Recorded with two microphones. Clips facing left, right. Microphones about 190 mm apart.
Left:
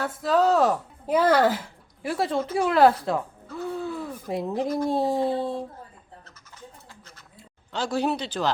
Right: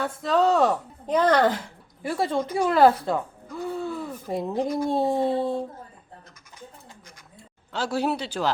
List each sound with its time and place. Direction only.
0.0 s speech: centre (ahead or behind)
7.7 s speech: 5° right (ahead or behind)